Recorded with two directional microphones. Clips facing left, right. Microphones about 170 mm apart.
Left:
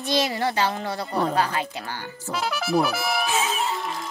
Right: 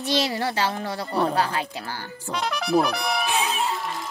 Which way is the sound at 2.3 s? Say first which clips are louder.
Right 1 dB; 5° left (ahead or behind).